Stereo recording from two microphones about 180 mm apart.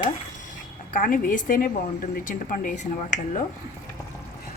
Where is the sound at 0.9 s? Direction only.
50° left (ahead or behind).